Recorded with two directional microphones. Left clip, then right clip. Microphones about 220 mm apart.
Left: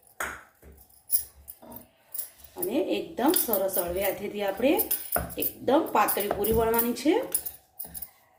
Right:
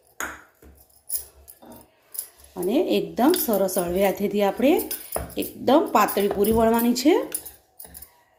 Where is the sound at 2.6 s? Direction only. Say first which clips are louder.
Right 6 dB; 50° right (ahead or behind).